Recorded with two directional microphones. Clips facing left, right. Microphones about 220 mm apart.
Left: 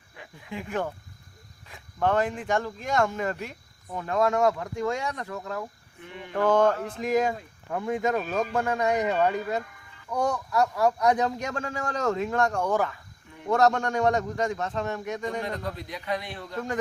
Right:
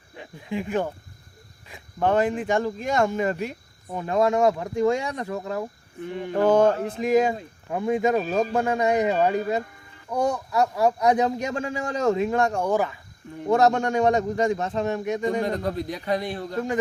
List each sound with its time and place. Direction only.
0.2 s a sound: 25° right (ahead or behind)
1.7 s speech: 20° right (ahead or behind)
6.0 s a man's voice: 40° right (ahead or behind)
8.5 s speech: 20° right (ahead or behind)
11.6 s speech: 10° right (ahead or behind)
13.8 s speech: 20° right (ahead or behind)
15.4 s a man's voice: 40° right (ahead or behind)